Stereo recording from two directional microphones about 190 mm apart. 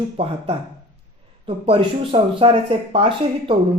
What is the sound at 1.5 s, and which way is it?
Speech, 30° right (ahead or behind).